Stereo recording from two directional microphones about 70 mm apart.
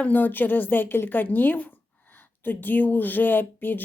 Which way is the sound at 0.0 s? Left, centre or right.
Left.